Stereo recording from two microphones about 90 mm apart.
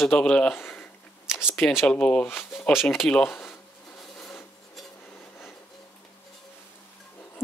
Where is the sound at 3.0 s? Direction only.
10° left (ahead or behind).